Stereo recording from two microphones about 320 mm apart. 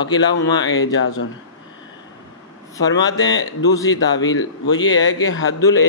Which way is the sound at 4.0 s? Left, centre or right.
Left.